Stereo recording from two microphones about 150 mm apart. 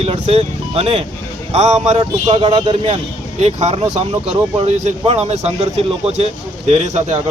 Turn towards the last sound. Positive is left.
turn(degrees=-45)  # may be behind; listen again after turning